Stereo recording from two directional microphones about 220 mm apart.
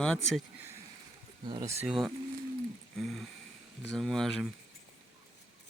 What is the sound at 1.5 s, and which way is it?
Speech, 20° right (ahead or behind).